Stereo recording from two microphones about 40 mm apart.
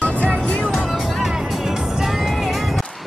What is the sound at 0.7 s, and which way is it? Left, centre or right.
Music, centre.